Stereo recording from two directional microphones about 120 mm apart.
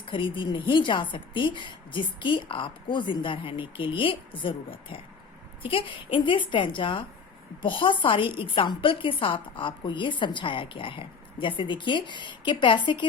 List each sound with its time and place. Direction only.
0.0 s a woman's voice: 45° left (ahead or behind)